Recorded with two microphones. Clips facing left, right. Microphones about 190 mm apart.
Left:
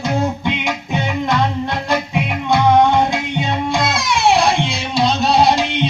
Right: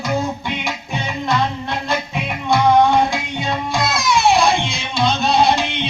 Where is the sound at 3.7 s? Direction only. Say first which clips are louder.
Left 1 dB; 25° left (ahead or behind).